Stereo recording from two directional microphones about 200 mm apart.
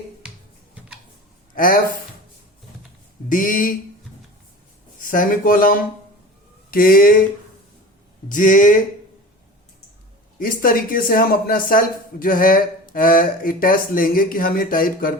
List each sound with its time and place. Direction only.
1.5 s speech: 45° left (ahead or behind)
3.2 s speech: 40° left (ahead or behind)
4.9 s speech: 45° left (ahead or behind)
8.3 s speech: 40° left (ahead or behind)
10.3 s speech: 45° left (ahead or behind)